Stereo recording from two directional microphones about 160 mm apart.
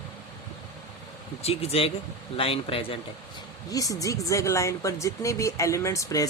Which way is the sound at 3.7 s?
20° left (ahead or behind).